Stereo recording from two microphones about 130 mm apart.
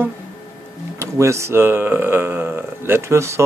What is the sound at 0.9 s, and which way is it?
Speech, 20° right (ahead or behind).